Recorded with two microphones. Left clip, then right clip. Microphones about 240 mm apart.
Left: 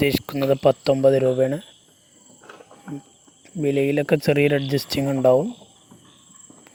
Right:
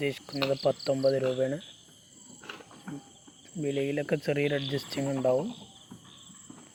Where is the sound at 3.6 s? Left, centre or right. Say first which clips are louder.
Left 10 dB; left.